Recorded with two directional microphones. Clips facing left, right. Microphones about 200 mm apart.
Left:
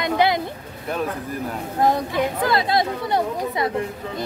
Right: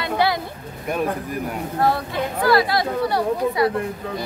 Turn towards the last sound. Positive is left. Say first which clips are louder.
# right 4 dB
turn(degrees=20)  # may be behind; listen again after turning